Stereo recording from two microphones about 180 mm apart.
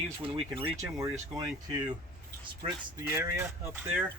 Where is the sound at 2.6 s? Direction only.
35° right (ahead or behind).